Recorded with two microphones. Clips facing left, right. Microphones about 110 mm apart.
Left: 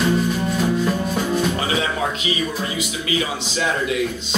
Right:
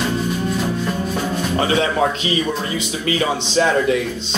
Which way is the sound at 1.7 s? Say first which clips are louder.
Right 5 dB; 35° right (ahead or behind).